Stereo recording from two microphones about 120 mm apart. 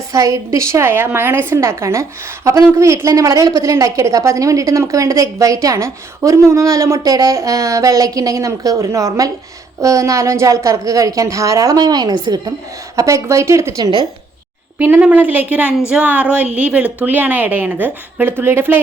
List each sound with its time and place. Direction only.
0.1 s a woman's voice: 25° right (ahead or behind)
14.8 s a woman's voice: 15° right (ahead or behind)